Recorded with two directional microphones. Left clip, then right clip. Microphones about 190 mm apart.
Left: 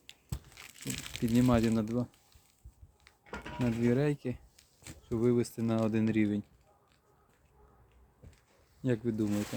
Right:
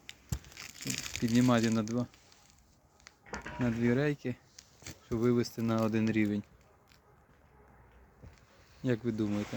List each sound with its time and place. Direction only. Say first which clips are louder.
0.1 s crumpling: right 3 dB; 35° right (ahead or behind)
1.4 s speech: even; 5° left (ahead or behind)
3.2 s a sound: even; 20° right (ahead or behind)
3.8 s speech: left 1 dB; 5° left (ahead or behind)
4.5 s a sound: right 3 dB; 55° right (ahead or behind)
5.0 s speech: left 1 dB; centre (ahead or behind)
8.8 s speech: even; 5° left (ahead or behind)